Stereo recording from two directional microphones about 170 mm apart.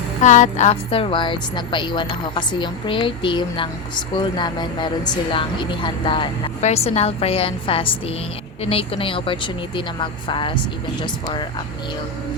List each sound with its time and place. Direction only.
0.2 s a woman's voice: 45° left (ahead or behind); by 6.3 s 30° left (ahead or behind)
6.6 s a woman's voice: 40° left (ahead or behind)